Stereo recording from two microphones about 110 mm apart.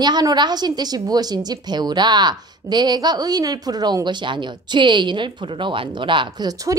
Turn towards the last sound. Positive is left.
turn(degrees=-35)  # may be behind; listen again after turning